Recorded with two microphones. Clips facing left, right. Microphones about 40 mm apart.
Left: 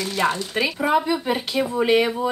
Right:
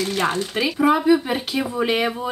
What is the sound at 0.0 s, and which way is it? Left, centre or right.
Speech, right.